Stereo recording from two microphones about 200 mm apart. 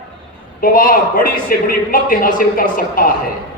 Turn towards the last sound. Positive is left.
turn(degrees=45)  # may be behind; listen again after turning